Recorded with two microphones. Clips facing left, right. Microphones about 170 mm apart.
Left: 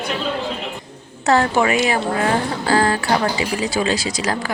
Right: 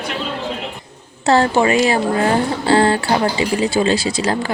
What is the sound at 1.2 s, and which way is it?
Speech, 30° right (ahead or behind).